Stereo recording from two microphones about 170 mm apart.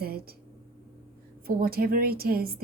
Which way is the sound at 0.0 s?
65° right (ahead or behind).